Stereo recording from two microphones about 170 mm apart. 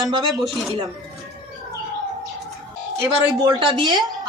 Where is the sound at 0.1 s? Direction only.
25° right (ahead or behind).